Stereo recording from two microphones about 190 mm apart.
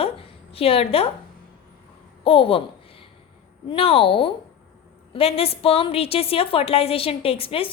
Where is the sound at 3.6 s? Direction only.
30° left (ahead or behind).